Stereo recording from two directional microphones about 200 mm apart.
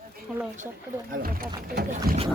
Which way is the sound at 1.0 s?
45° right (ahead or behind).